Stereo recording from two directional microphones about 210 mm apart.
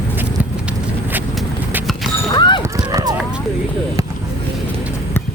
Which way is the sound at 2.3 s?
20° left (ahead or behind).